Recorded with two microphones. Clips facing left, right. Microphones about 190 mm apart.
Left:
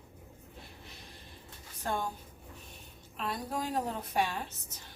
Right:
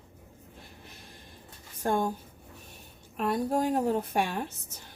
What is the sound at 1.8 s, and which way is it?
Speech, 50° right (ahead or behind).